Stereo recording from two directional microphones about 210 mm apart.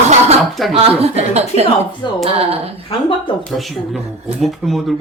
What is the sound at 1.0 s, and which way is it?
A woman's voice, 30° right (ahead or behind).